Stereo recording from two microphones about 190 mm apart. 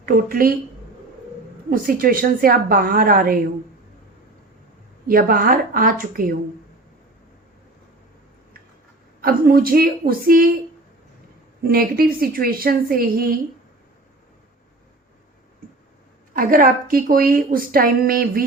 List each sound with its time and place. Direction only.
0.0 s a woman's voice: 50° right (ahead or behind)
1.7 s a woman's voice: 50° right (ahead or behind)
5.0 s a woman's voice: 50° right (ahead or behind)
9.2 s a woman's voice: 50° right (ahead or behind)
11.6 s a woman's voice: 50° right (ahead or behind)
16.3 s a woman's voice: 50° right (ahead or behind)